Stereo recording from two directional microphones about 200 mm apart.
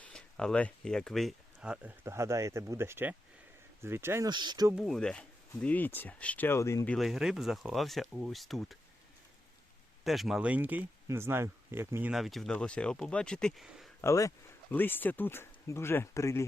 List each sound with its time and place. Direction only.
0.0 s speech: 5° left (ahead or behind); by 4.7 s 20° right (ahead or behind)
4.7 s speech: centre (ahead or behind)
10.0 s speech: centre (ahead or behind)
12.1 s speech: centre (ahead or behind)
14.0 s speech: 15° left (ahead or behind)